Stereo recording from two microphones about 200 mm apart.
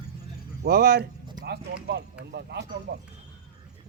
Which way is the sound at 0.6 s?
55° right (ahead or behind).